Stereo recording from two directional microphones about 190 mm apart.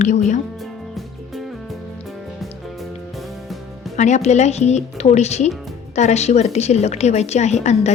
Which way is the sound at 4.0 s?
40° left (ahead or behind).